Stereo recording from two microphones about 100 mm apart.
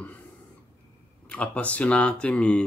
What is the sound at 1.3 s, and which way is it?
Speech, 15° left (ahead or behind).